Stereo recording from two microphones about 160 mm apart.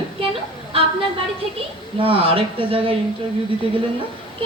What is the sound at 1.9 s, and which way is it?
A man's voice, 35° right (ahead or behind).